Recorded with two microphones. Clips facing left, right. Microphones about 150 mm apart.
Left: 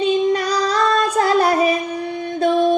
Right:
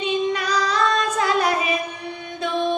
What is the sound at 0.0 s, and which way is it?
Female singing, 40° left (ahead or behind).